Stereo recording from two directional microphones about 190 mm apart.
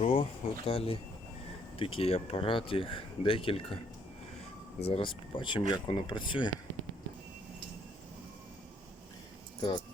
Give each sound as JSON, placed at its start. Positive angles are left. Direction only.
{"t": 0.0, "sound": "speech", "side_deg": 30}
{"t": 4.9, "sound": "speech", "side_deg": 25}
{"t": 9.6, "sound": "speech", "side_deg": 25}